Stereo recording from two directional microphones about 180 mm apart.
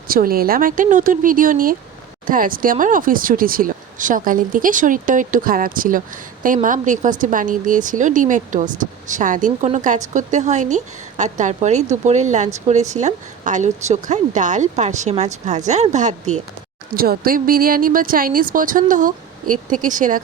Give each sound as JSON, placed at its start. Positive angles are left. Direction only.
{"t": 0.1, "sound": "a woman's voice", "side_deg": -55}
{"t": 16.9, "sound": "speech", "side_deg": -55}